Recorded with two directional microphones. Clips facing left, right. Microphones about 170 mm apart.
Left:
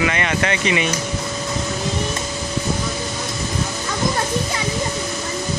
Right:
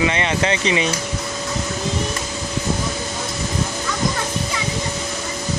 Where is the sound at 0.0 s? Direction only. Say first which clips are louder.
Right 1 dB; 25° right (ahead or behind).